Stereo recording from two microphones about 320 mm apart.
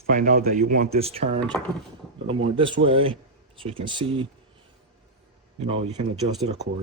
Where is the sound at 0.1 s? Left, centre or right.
Right.